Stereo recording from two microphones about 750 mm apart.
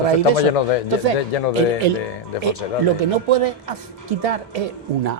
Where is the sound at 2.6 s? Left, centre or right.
Left.